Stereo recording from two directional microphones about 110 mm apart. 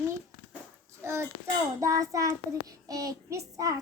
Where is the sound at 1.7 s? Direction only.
30° right (ahead or behind).